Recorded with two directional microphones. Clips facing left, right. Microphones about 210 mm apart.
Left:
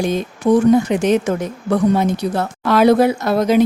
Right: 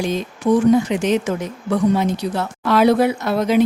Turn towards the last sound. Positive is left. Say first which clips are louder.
# left 2 dB
turn(degrees=40)  # may be behind; listen again after turning